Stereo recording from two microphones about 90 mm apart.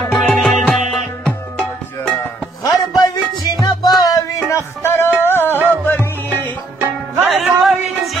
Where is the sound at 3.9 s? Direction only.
40° left (ahead or behind).